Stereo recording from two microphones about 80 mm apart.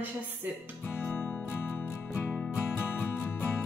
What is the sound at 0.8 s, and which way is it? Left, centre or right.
Music, left.